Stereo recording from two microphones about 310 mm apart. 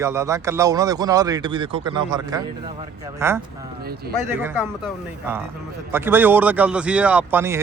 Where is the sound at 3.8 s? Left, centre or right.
Right.